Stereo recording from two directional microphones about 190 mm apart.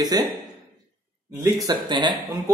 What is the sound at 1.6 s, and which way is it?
Speech, 25° right (ahead or behind).